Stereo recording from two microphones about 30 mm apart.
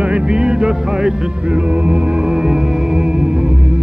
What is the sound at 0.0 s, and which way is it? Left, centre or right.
Music, right.